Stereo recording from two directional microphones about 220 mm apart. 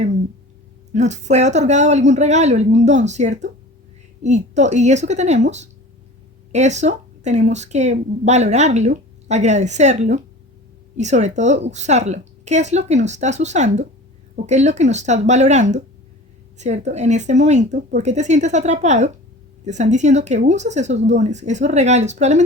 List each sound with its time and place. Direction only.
0.9 s speech: 30° right (ahead or behind)